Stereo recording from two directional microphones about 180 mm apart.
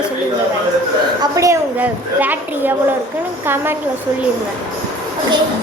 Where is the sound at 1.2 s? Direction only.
15° right (ahead or behind).